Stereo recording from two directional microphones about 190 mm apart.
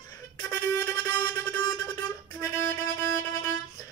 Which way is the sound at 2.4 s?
15° left (ahead or behind).